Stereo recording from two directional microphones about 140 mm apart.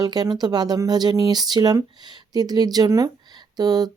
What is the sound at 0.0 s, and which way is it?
Speech, 30° right (ahead or behind).